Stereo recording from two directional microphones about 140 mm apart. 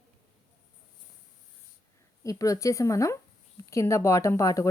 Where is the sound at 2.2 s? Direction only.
25° left (ahead or behind).